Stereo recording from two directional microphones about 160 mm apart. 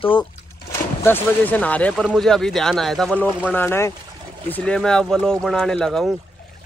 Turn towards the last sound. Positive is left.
turn(degrees=5)  # may be behind; listen again after turning